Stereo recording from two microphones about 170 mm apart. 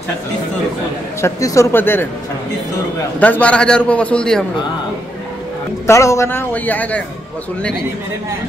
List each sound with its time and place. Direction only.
1.2 s a man's voice: 20° left (ahead or behind)
3.2 s a man's voice: 10° left (ahead or behind)
5.9 s a man's voice: 20° left (ahead or behind)